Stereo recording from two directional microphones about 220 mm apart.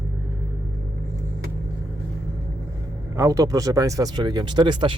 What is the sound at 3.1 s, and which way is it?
Speech, 15° right (ahead or behind).